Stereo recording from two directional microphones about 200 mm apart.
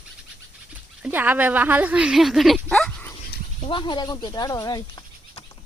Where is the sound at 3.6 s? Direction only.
25° left (ahead or behind).